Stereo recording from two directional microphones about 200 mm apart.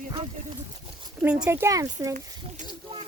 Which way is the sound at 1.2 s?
5° right (ahead or behind).